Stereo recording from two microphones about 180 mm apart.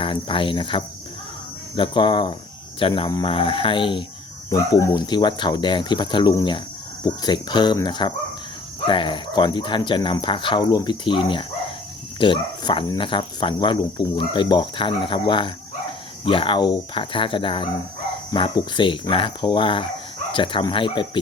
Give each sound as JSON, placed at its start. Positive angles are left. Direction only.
{"t": 0.0, "sound": "speech", "side_deg": 30}
{"t": 4.4, "sound": "speech", "side_deg": 15}